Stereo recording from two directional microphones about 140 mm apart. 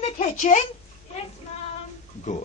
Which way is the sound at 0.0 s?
60° left (ahead or behind).